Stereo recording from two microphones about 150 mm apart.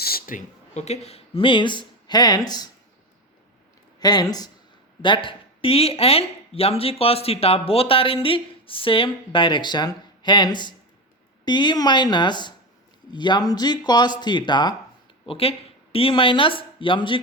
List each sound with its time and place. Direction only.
0.0 s speech: 85° left; by 2.6 s 25° left (ahead or behind)
4.0 s speech: 25° left (ahead or behind)